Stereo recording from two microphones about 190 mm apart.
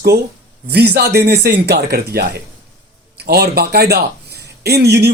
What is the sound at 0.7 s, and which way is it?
A man's voice, 60° right (ahead or behind).